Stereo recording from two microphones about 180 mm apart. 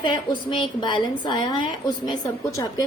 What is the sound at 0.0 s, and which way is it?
A woman's voice, 25° left (ahead or behind).